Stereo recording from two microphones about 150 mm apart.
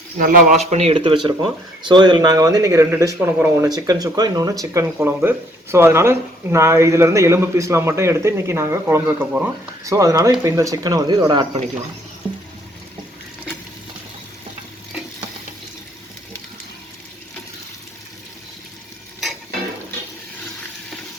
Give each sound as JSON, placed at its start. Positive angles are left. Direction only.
{"t": 0.2, "sound": "speech", "side_deg": -65}
{"t": 3.7, "sound": "speech", "side_deg": -25}
{"t": 9.8, "sound": "speech", "side_deg": -20}